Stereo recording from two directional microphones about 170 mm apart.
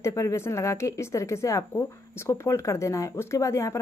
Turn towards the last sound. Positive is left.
turn(degrees=15)  # may be behind; listen again after turning